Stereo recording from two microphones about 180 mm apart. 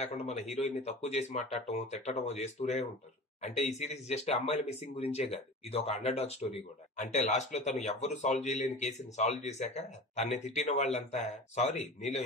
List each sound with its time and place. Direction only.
0.0 s speech: 35° left (ahead or behind)